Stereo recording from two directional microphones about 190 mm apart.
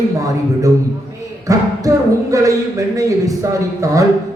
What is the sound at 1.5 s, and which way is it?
Speech, 15° right (ahead or behind).